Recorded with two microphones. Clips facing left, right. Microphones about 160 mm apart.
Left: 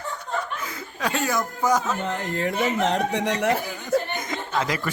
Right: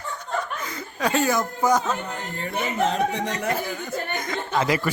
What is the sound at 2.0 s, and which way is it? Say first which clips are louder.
Speech: left 6 dB; 85° left.